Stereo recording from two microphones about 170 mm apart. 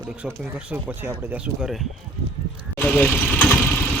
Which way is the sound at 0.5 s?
10° right (ahead or behind).